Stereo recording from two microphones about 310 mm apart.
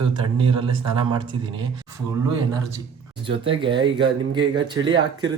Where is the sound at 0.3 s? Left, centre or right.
Centre.